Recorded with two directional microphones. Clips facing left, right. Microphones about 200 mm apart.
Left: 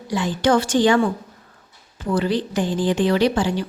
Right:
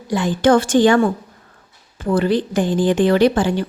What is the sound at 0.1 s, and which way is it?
A woman's voice, 50° right (ahead or behind).